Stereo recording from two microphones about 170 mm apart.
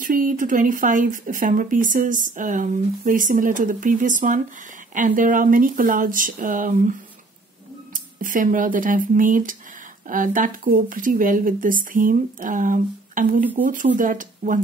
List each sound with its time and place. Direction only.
0.0 s speech: 50° right (ahead or behind)